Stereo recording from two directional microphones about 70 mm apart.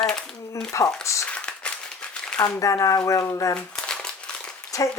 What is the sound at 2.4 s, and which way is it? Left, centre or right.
Speech, left.